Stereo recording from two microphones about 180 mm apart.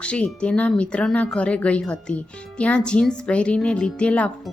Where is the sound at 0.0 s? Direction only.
5° left (ahead or behind).